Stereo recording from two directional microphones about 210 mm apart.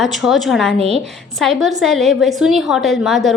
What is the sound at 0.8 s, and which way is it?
Speech, 30° right (ahead or behind).